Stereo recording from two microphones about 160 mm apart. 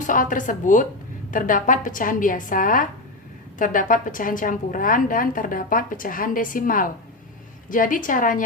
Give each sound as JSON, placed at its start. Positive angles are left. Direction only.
{"t": 0.1, "sound": "a woman's voice", "side_deg": 55}